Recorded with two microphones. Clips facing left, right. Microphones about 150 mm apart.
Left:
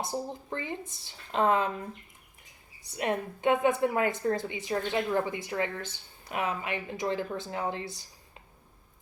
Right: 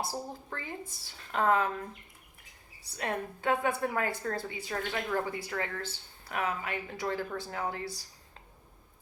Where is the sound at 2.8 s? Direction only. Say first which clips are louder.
Left 4 dB; 20° left (ahead or behind).